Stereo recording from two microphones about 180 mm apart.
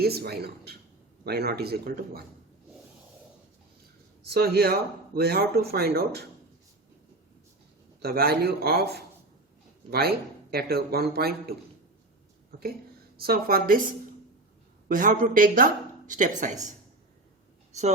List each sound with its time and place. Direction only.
0.0 s speech: 60° right (ahead or behind)
4.3 s speech: 60° right (ahead or behind)
8.0 s speech: 60° right (ahead or behind)
12.5 s a sound: 60° right (ahead or behind)
13.1 s speech: 55° right (ahead or behind)
14.8 s a woman's voice: 50° right (ahead or behind)